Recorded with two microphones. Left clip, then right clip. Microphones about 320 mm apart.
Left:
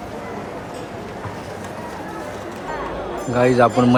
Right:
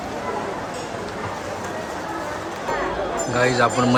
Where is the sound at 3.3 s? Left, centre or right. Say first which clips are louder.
Left 4 dB; centre.